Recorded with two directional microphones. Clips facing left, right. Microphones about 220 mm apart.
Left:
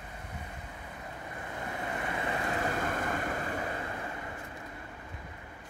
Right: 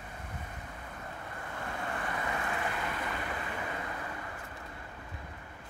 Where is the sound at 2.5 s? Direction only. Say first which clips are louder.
Left 4 dB; 40° left (ahead or behind).